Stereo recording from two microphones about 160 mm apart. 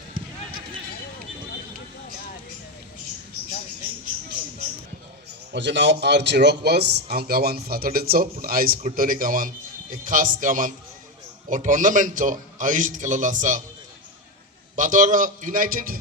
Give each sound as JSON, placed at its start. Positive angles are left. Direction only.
{"t": 5.5, "sound": "a man's voice", "side_deg": -90}
{"t": 14.8, "sound": "a man's voice", "side_deg": -50}